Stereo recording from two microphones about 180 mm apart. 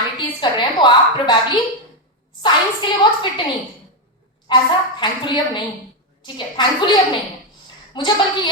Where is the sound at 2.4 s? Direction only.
25° left (ahead or behind).